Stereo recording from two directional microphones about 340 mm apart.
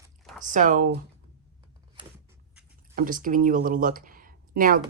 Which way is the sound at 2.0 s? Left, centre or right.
Centre.